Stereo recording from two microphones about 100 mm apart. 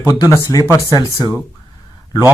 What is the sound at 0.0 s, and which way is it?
Speech, 30° left (ahead or behind).